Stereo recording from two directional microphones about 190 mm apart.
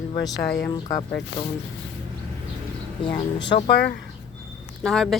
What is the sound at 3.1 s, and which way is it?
Speech, 65° left (ahead or behind).